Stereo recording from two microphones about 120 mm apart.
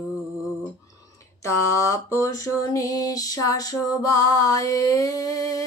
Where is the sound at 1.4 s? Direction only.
25° left (ahead or behind).